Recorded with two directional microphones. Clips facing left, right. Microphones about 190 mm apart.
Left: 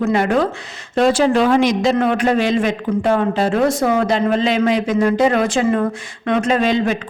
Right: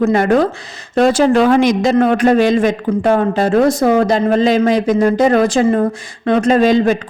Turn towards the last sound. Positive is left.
turn(degrees=-40)  # may be behind; listen again after turning